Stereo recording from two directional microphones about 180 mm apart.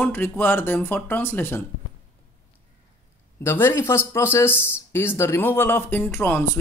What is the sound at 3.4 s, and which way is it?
Speech, 15° left (ahead or behind).